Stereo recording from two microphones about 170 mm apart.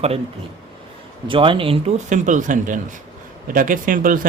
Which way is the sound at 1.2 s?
30° right (ahead or behind).